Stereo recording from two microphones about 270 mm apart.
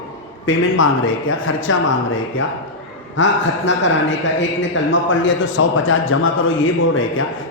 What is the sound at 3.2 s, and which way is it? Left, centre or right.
A man's voice, left.